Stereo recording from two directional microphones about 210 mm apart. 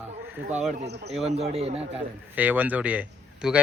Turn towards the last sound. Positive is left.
turn(degrees=-5)  # may be behind; listen again after turning